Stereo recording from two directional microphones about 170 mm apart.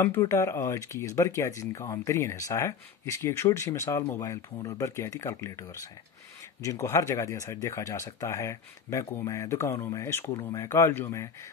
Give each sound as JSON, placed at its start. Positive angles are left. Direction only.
{"t": 0.0, "sound": "speech", "side_deg": 15}